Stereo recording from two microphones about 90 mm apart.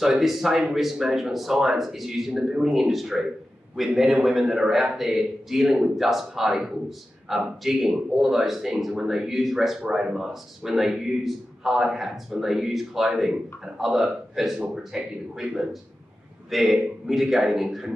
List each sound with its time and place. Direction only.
0.0 s speech: 5° right (ahead or behind)